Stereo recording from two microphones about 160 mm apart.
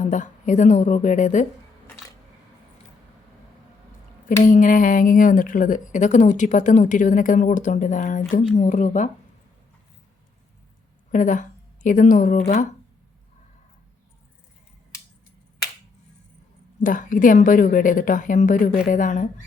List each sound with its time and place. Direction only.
0.1 s a woman's voice: 50° left (ahead or behind)
4.4 s a woman's voice: 55° left (ahead or behind)
11.1 s speech: 55° left (ahead or behind)
16.8 s a woman's voice: 55° left (ahead or behind)